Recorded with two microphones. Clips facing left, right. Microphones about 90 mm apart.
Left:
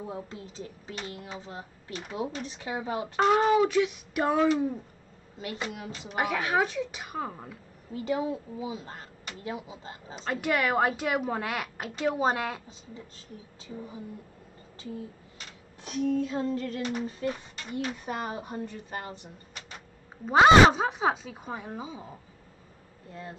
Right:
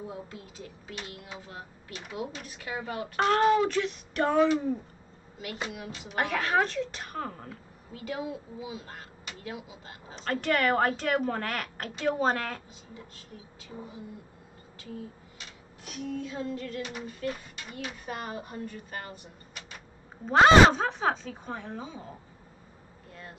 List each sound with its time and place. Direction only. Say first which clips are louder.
0.0 s speech: left 2 dB; 30° left (ahead or behind)
2.8 s speech: left 3 dB; 20° left (ahead or behind)
3.2 s a sound: left 1 dB; 5° left (ahead or behind)
6.1 s speech: even; 10° left (ahead or behind)
7.9 s speech: left 6 dB; 25° left (ahead or behind)
10.1 s speech: even; 10° left (ahead or behind)
15.9 s female singing: left 8 dB; 40° left (ahead or behind)
18.0 s speech: left 3 dB; 20° left (ahead or behind)
20.2 s speech: left 1 dB; 5° left (ahead or behind)